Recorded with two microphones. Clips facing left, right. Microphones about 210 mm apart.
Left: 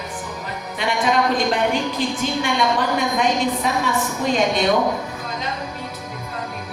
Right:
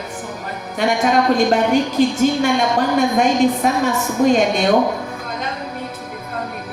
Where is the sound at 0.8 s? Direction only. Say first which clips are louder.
Right 6 dB; 45° right (ahead or behind).